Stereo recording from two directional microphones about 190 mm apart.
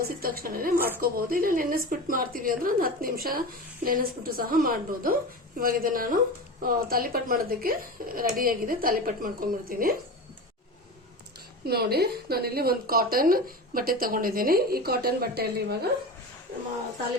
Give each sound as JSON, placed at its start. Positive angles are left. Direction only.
{"t": 0.0, "sound": "speech", "side_deg": -50}
{"t": 11.6, "sound": "speech", "side_deg": -55}